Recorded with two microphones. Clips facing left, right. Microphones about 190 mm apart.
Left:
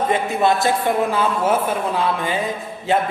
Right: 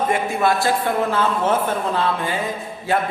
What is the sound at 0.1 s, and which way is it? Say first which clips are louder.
A man's voice: left 1 dB; 20° left (ahead or behind).